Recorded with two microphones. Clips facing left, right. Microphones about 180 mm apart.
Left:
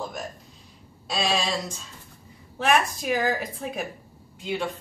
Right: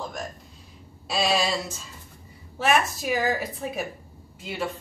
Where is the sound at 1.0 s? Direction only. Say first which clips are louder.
Right 2 dB; 5° right (ahead or behind).